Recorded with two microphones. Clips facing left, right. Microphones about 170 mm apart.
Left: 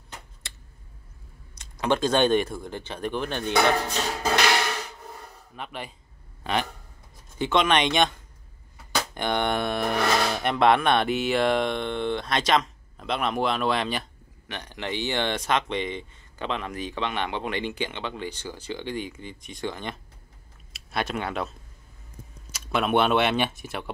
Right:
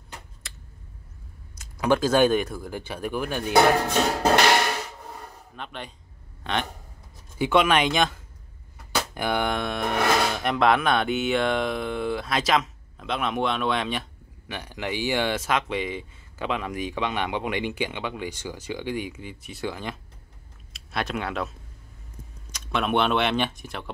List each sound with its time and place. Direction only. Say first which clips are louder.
1.6 s a sound: right 2 dB; 5° right (ahead or behind)
2.0 s speech: right 1 dB; 5° right (ahead or behind)
3.9 s music: right 6 dB; 65° right (ahead or behind)
5.6 s speech: left 1 dB; 5° left (ahead or behind)
7.3 s speech: right 2 dB; 10° right (ahead or behind)
14.5 s speech: right 1 dB; 10° right (ahead or behind)
22.5 s speech: left 1 dB; 5° left (ahead or behind)